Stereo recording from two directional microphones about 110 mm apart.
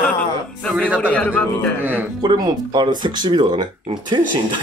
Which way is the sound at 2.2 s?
40° right (ahead or behind).